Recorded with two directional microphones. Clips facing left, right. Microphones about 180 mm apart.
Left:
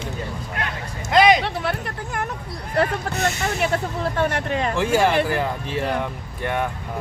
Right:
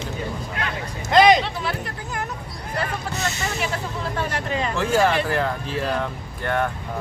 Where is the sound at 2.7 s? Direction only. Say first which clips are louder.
Left 6 dB; 55° left (ahead or behind).